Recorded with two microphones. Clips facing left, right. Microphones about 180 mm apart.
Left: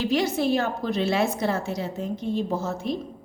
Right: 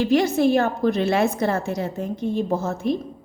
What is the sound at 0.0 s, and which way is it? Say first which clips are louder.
A woman's voice: right 5 dB; 50° right (ahead or behind).